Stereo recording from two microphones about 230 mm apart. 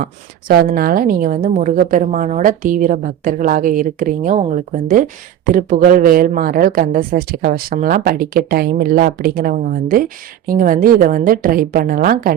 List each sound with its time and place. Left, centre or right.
0.7 s speech: right